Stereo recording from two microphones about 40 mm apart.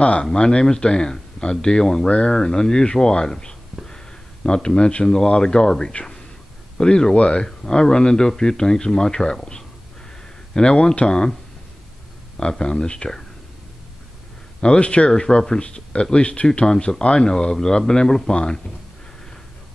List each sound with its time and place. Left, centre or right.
0.2 s speech: left
3.8 s a sound: centre
5.3 s speech: centre
12.4 s speech: centre
14.6 s speech: left
16.6 s speech: centre